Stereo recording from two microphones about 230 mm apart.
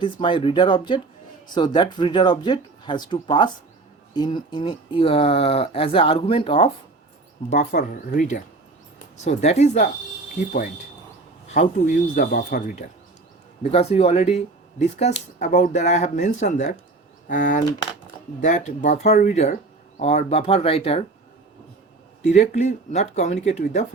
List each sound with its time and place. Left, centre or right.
0.0 s speech: left
7.5 s speech: left
11.4 s speech: left
13.6 s speech: left
22.2 s speech: left